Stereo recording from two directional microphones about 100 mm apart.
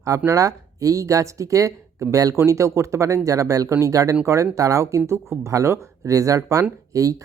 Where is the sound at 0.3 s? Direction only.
35° right (ahead or behind).